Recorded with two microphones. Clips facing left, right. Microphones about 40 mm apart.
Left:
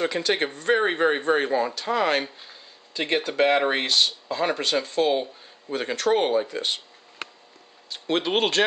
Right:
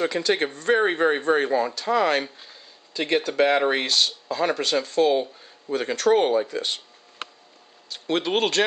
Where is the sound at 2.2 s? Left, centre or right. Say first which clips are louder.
Even; centre.